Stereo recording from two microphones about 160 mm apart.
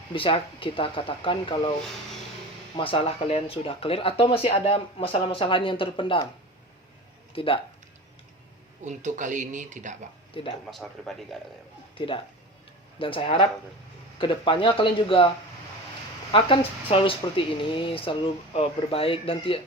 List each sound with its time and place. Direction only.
0.1 s speech: 35° left (ahead or behind)
2.7 s speech: 35° left (ahead or behind)
7.3 s speech: 35° left (ahead or behind)
8.8 s speech: 50° right (ahead or behind)
10.7 s a man's voice: centre (ahead or behind)
11.9 s speech: 35° left (ahead or behind)
16.3 s speech: 35° left (ahead or behind)